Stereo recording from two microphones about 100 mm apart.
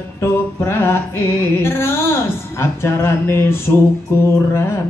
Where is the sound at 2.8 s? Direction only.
25° left (ahead or behind).